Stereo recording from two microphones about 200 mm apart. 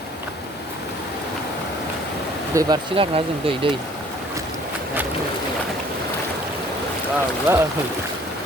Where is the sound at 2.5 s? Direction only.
20° right (ahead or behind).